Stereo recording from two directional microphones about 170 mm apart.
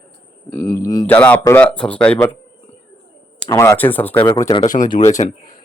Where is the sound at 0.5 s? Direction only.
20° left (ahead or behind).